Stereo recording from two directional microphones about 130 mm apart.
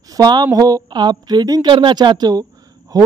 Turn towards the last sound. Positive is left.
turn(degrees=-30)  # may be behind; listen again after turning